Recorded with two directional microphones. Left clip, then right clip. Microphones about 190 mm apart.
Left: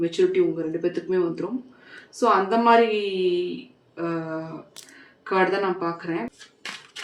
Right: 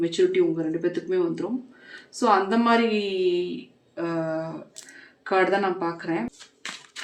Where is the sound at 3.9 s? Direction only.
35° right (ahead or behind).